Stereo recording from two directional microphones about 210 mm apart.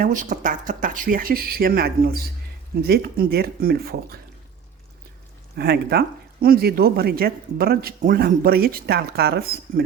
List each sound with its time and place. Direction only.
0.0 s speech: 40° right (ahead or behind)
5.5 s speech: 50° right (ahead or behind)